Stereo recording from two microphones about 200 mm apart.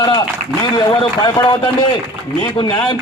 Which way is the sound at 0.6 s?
25° left (ahead or behind).